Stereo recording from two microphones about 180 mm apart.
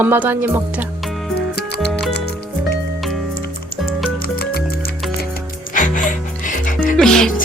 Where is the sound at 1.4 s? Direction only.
65° left (ahead or behind).